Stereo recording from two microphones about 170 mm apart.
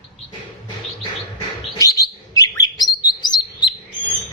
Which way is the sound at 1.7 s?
20° left (ahead or behind).